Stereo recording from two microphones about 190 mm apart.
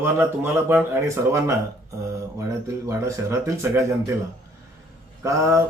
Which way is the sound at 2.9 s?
15° right (ahead or behind).